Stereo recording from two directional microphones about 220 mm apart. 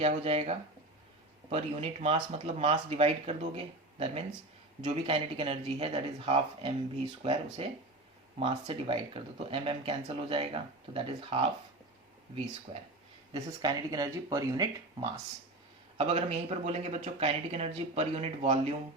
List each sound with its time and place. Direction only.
0.0 s speech: 25° right (ahead or behind)
12.7 s speech: 25° right (ahead or behind)